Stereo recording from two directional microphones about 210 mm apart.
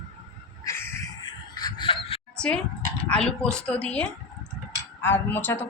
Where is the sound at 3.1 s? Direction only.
5° left (ahead or behind).